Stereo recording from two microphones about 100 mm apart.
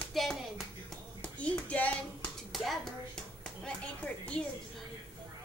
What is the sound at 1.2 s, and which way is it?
Clapping, 15° left (ahead or behind).